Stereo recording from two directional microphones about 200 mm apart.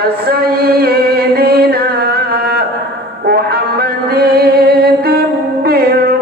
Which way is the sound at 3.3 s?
50° right (ahead or behind).